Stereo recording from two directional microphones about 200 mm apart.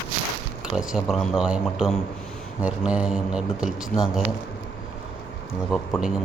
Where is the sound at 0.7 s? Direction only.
Centre (ahead or behind).